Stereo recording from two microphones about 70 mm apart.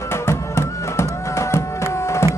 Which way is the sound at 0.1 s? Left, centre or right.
Left.